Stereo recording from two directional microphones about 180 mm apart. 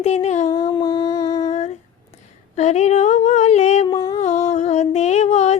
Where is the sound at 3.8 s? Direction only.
25° left (ahead or behind).